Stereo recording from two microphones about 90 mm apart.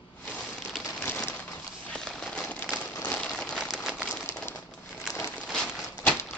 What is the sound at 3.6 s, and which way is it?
Crumpling, 5° right (ahead or behind).